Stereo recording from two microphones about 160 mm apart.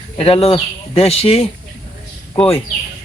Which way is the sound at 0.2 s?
35° left (ahead or behind).